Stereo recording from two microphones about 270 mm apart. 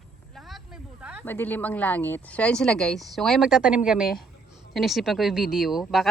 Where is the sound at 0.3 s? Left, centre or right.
Centre.